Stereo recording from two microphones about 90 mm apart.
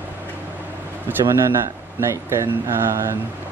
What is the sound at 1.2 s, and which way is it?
A man's voice, 30° right (ahead or behind).